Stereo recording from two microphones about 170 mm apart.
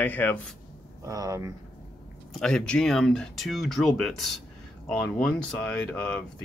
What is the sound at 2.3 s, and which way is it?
Speech, 5° left (ahead or behind).